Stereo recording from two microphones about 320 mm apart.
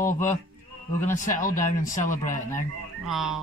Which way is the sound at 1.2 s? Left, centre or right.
Left.